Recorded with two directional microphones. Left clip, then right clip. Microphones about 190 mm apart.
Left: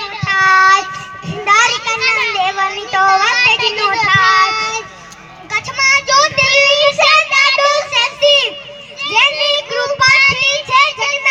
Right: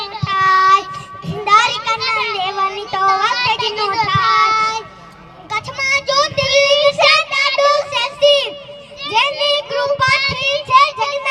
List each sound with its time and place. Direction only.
0.3 s child singing: 50° right (ahead or behind)
1.3 s children playing: 50° right (ahead or behind)
5.5 s child singing: 50° right (ahead or behind)